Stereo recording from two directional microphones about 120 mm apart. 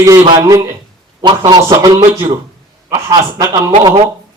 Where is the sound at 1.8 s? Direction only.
25° right (ahead or behind).